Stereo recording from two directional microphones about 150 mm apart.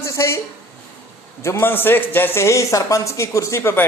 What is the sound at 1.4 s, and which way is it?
Speech, 15° left (ahead or behind).